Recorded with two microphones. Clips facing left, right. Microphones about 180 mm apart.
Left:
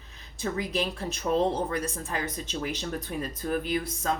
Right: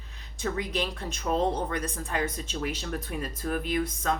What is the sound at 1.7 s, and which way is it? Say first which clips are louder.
Speech: left 1 dB; 35° left (ahead or behind).